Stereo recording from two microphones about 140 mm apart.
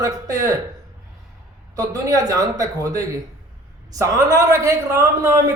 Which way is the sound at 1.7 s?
25° right (ahead or behind).